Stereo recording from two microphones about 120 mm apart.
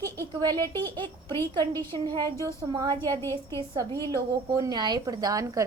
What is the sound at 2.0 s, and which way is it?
Speech, 35° right (ahead or behind).